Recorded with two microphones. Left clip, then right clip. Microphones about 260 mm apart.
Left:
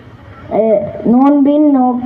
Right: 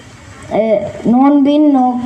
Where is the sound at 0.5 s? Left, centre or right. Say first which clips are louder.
Left 1 dB; right.